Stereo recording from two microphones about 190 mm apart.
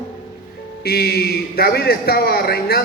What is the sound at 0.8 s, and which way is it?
A man's voice, 55° left (ahead or behind).